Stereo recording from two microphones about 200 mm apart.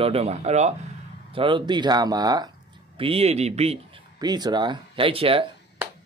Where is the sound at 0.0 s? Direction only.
30° right (ahead or behind).